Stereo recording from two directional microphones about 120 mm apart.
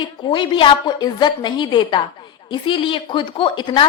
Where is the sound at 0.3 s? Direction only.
45° left (ahead or behind).